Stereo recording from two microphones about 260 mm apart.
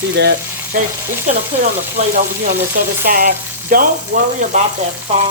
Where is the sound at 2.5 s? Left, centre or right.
Right.